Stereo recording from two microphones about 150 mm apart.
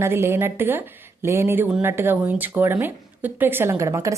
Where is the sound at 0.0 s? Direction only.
15° right (ahead or behind).